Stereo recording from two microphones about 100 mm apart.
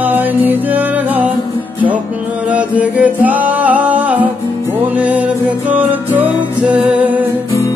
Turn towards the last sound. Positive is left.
turn(degrees=-15)  # may be behind; listen again after turning